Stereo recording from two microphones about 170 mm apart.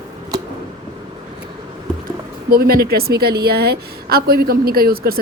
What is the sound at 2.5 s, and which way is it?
A woman's voice, 60° right (ahead or behind).